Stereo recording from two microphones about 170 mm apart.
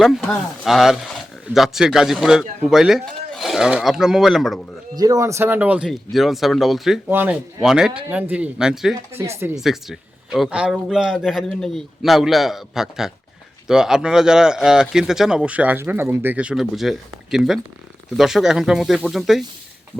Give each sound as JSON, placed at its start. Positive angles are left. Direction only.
{"t": 0.0, "sound": "speech", "side_deg": 0}
{"t": 4.9, "sound": "speech", "side_deg": -20}
{"t": 9.1, "sound": "speech", "side_deg": -15}
{"t": 9.6, "sound": "speech", "side_deg": 0}